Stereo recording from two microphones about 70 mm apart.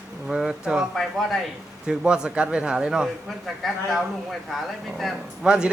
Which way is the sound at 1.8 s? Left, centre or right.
Centre.